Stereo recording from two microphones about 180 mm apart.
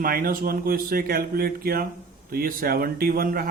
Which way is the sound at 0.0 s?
55° right (ahead or behind).